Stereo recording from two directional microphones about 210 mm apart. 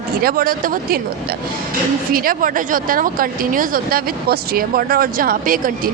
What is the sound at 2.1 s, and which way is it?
Speech, 40° right (ahead or behind).